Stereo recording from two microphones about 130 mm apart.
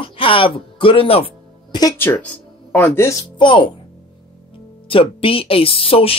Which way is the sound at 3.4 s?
40° left (ahead or behind).